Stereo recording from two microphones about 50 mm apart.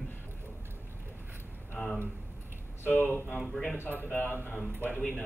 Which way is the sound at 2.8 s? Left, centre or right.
Left.